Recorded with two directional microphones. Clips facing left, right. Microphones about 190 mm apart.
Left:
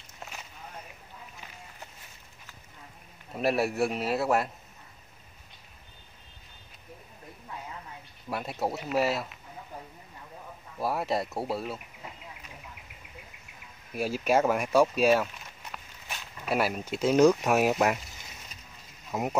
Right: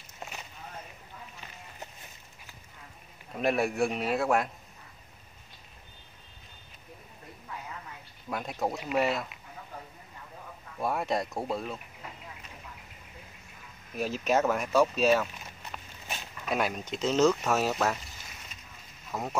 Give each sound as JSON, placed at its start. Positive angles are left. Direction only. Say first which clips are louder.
{"t": 3.3, "sound": "a man's voice", "louder": "left 1 dB", "side_deg": 5}
{"t": 8.3, "sound": "a man's voice", "louder": "left 1 dB", "side_deg": 5}
{"t": 10.8, "sound": "a man's voice", "louder": "left 1 dB", "side_deg": 5}
{"t": 13.9, "sound": "speech", "louder": "left 2 dB", "side_deg": 10}
{"t": 16.4, "sound": "speech", "louder": "left 2 dB", "side_deg": 5}
{"t": 19.1, "sound": "speech", "louder": "left 4 dB", "side_deg": 20}